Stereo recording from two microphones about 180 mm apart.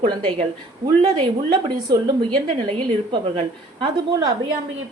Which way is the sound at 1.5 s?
25° right (ahead or behind).